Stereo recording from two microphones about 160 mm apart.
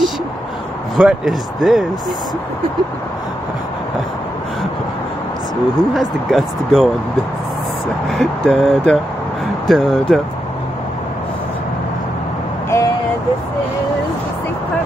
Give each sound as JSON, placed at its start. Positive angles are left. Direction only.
{"t": 0.9, "sound": "speech", "side_deg": 0}
{"t": 5.9, "sound": "speech", "side_deg": 0}
{"t": 8.1, "sound": "speech", "side_deg": 0}
{"t": 12.6, "sound": "vehicle", "side_deg": 20}